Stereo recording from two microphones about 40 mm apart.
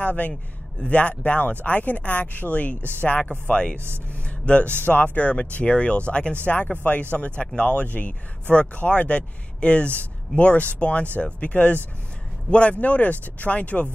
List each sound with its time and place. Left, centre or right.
0.0 s a man's voice: left
6.4 s a man's voice: left